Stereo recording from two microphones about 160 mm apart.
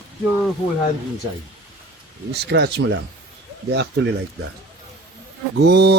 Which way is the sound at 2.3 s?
90° right.